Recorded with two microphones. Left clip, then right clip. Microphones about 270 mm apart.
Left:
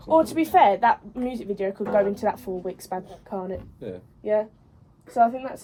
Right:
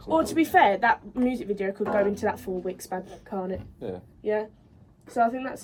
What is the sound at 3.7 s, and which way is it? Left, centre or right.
Speech, right.